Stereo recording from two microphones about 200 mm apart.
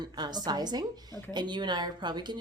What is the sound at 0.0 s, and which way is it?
Speech, 20° right (ahead or behind).